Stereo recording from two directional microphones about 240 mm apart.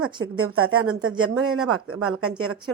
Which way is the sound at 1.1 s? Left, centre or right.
Centre.